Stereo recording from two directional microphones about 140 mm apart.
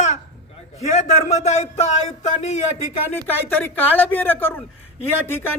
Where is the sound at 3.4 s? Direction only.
15° left (ahead or behind).